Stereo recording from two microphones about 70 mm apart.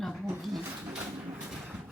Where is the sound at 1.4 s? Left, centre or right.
Centre.